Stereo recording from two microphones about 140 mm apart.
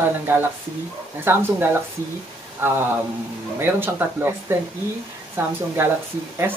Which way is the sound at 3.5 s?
15° right (ahead or behind).